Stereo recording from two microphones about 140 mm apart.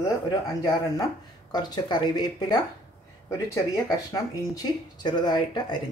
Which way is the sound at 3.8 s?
25° left (ahead or behind).